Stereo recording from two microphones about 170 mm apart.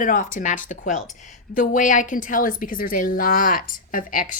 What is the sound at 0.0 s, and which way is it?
Speech, 50° left (ahead or behind).